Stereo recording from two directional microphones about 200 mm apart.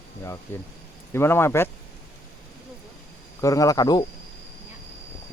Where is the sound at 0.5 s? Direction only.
10° left (ahead or behind).